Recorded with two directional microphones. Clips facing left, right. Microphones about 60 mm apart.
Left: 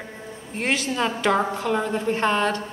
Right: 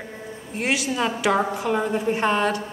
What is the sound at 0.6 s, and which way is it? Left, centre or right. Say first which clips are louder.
A woman's voice: even; centre.